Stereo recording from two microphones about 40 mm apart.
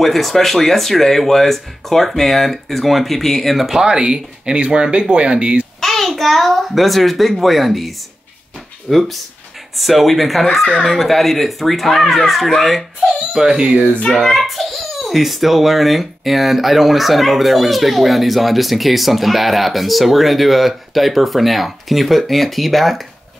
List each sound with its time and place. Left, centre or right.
0.0 s a child's voice: centre
3.5 s a child's voice: centre
3.8 s speech: right
5.8 s a child's voice: centre
13.1 s baby cry: centre
13.5 s speech: right
14.1 s a child's voice: centre